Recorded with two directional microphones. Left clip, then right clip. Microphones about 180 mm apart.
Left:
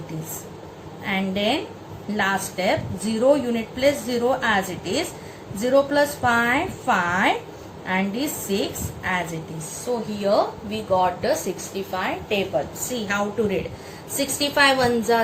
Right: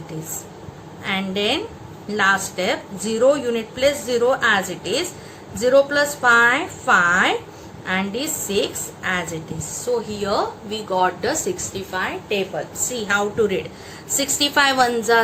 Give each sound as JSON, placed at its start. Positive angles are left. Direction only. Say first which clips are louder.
{"t": 1.0, "sound": "speech", "louder": "right 2 dB", "side_deg": -65}
{"t": 10.2, "sound": "a woman's voice", "louder": "left 5 dB", "side_deg": -60}
{"t": 12.9, "sound": "a woman's voice", "louder": "right 5 dB", "side_deg": -60}